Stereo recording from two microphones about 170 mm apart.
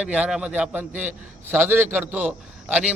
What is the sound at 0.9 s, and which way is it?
Speech, 45° right (ahead or behind).